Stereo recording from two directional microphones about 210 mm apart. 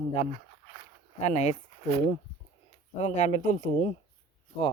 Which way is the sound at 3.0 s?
35° left (ahead or behind).